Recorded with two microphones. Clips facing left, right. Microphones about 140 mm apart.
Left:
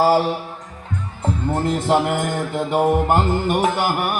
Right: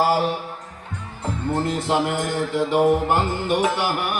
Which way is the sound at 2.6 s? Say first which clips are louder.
Left 1 dB; 50° left (ahead or behind).